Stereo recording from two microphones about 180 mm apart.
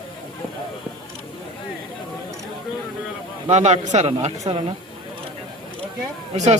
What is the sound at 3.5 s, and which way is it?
A man's voice, 40° right (ahead or behind).